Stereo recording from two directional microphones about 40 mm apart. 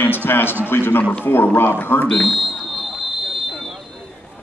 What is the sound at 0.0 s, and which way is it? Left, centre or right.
A man's voice, left.